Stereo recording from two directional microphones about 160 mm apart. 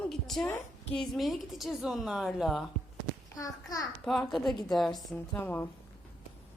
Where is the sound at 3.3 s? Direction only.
20° left (ahead or behind).